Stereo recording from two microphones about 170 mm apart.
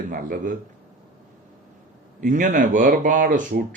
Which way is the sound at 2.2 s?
50° right (ahead or behind).